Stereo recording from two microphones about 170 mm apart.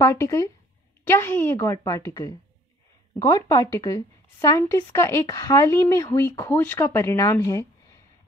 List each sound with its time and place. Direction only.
0.0 s speech: 20° left (ahead or behind)